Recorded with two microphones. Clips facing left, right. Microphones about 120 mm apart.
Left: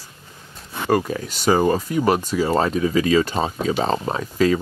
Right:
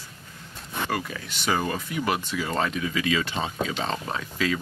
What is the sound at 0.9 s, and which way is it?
Speech, 40° left (ahead or behind).